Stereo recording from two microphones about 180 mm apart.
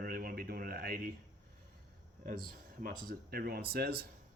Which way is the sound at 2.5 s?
50° right (ahead or behind).